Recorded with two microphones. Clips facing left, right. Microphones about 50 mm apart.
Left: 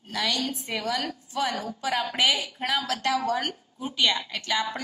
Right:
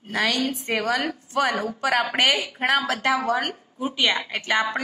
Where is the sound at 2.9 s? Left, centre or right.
Right.